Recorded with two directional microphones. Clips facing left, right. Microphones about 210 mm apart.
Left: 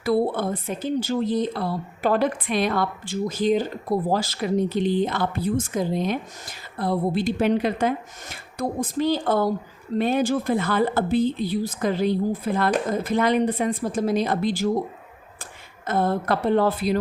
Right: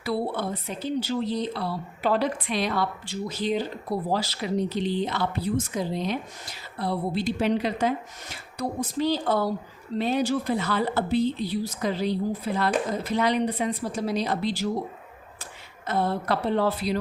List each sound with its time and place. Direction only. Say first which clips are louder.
0.0 s speech: left 6 dB; 50° left (ahead or behind)
15.9 s speech: left 3 dB; 50° left (ahead or behind)